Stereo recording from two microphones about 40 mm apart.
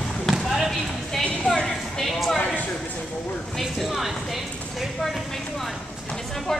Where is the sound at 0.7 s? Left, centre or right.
Centre.